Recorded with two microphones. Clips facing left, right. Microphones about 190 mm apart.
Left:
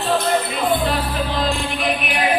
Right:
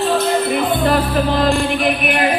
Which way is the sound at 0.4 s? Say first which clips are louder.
Right 4 dB; 55° right (ahead or behind).